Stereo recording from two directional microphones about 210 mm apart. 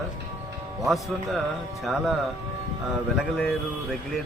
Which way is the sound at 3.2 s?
Centre (ahead or behind).